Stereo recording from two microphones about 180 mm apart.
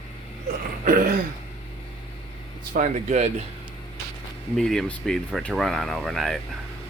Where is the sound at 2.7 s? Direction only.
45° right (ahead or behind).